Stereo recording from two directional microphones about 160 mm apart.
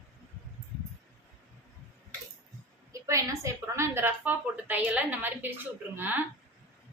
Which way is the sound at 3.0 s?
20° right (ahead or behind).